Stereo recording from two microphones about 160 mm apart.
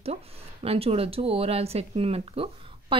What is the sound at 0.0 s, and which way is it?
Speech, 40° right (ahead or behind).